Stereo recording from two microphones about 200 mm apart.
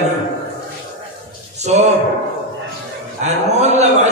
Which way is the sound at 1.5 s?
35° right (ahead or behind).